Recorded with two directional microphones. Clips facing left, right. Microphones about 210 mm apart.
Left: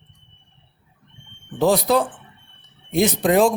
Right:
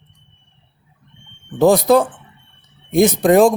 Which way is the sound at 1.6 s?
50° right (ahead or behind).